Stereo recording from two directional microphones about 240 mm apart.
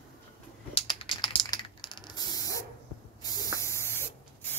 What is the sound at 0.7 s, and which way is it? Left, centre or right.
Typing, left.